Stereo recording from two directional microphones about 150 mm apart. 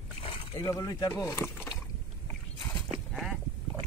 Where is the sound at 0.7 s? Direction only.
25° left (ahead or behind).